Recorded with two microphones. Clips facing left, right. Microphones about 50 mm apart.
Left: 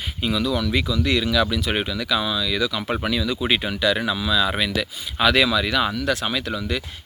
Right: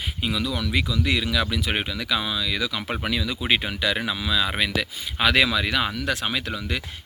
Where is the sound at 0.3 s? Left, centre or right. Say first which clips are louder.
Left 5 dB; centre.